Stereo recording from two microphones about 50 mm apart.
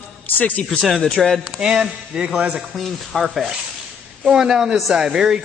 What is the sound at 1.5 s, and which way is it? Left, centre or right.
Speech, centre.